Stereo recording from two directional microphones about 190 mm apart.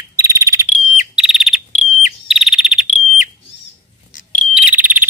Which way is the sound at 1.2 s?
5° right (ahead or behind).